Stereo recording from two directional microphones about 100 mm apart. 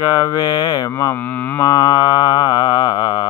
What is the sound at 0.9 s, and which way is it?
Mantra, 25° left (ahead or behind).